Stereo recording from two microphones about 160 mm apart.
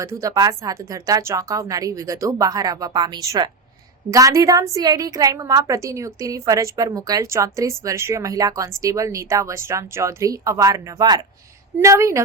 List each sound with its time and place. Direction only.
0.0 s a woman's voice: 20° right (ahead or behind)